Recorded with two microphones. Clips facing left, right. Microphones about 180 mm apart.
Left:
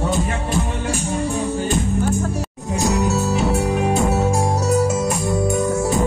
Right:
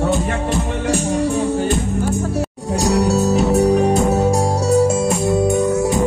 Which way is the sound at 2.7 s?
35° right (ahead or behind).